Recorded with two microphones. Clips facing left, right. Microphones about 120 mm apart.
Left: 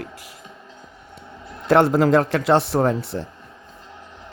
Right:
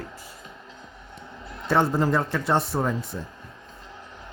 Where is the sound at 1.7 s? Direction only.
90° left; by 3.3 s 70° left (ahead or behind).